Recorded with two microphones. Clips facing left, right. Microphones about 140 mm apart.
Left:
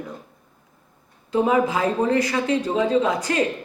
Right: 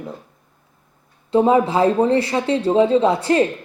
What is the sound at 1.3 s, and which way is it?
Speech, 30° right (ahead or behind).